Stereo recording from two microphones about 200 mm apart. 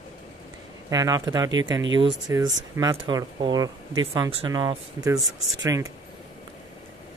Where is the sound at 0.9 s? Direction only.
20° right (ahead or behind).